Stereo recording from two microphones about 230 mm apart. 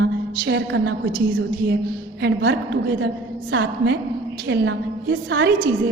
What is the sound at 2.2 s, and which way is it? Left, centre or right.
A woman's voice, right.